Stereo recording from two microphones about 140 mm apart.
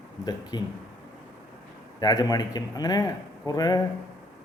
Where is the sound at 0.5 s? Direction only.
30° left (ahead or behind).